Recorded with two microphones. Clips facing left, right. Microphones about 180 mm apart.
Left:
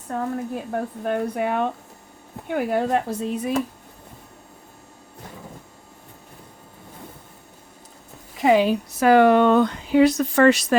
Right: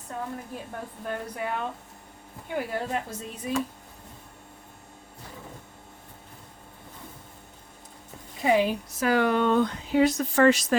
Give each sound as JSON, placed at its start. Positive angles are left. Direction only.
{"t": 0.1, "sound": "speech", "side_deg": 65}
{"t": 8.4, "sound": "speech", "side_deg": 90}